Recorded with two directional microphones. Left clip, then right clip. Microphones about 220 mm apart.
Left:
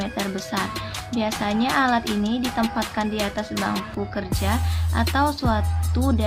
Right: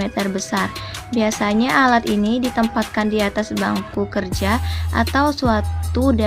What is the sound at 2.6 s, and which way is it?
Music, 25° right (ahead or behind).